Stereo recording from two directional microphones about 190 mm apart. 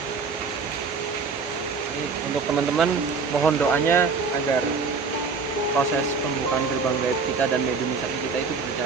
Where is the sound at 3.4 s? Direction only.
10° left (ahead or behind).